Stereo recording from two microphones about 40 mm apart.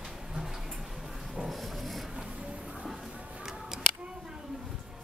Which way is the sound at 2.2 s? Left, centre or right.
Right.